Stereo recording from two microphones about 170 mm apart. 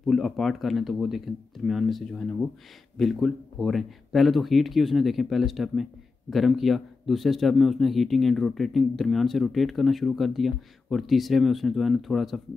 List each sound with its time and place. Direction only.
0.0 s speech: centre (ahead or behind)